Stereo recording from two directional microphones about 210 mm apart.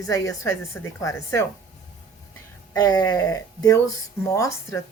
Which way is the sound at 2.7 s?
20° left (ahead or behind).